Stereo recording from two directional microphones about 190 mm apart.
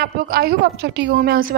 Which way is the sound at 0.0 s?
55° right (ahead or behind).